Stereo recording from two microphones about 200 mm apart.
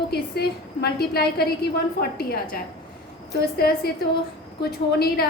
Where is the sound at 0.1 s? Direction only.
55° left (ahead or behind).